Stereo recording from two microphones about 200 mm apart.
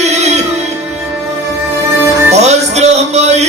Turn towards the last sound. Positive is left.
turn(degrees=-35)  # may be behind; listen again after turning